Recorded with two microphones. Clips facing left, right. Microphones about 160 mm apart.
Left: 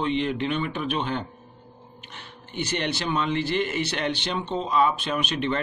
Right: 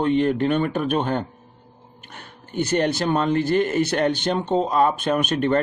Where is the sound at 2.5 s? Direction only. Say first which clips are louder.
Right 7 dB; 45° right (ahead or behind).